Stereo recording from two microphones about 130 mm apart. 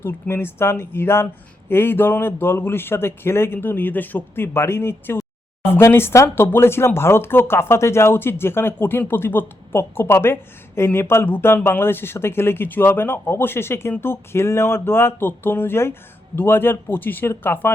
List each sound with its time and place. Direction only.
0.0 s speech: 20° left (ahead or behind)